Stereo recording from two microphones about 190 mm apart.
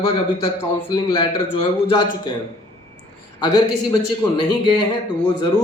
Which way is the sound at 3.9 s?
25° left (ahead or behind).